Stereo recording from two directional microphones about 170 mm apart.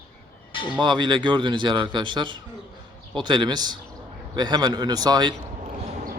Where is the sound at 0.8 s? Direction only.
25° right (ahead or behind).